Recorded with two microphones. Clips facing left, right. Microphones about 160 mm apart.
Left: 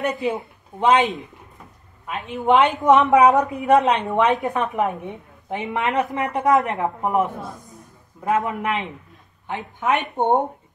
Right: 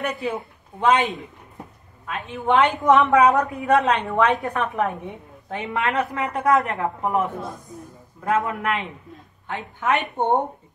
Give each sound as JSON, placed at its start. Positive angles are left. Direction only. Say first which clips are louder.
{"t": 0.0, "sound": "a woman's voice", "louder": "left 3 dB", "side_deg": 15}